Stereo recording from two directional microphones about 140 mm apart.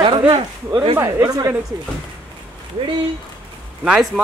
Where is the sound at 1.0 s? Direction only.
20° right (ahead or behind).